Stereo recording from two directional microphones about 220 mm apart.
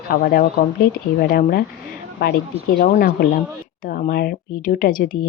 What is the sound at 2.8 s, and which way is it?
Speech, 45° left (ahead or behind).